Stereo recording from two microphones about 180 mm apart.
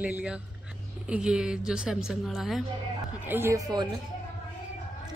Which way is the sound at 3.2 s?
15° right (ahead or behind).